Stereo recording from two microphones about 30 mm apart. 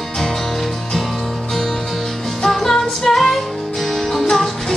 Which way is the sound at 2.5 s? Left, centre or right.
Centre.